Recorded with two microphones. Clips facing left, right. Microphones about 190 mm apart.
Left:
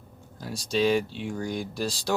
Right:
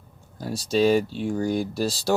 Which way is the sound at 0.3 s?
35° right (ahead or behind).